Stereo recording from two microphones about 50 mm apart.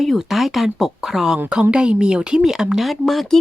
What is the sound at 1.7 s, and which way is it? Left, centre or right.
Speech, centre.